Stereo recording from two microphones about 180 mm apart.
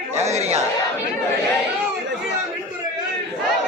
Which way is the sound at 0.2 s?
35° right (ahead or behind).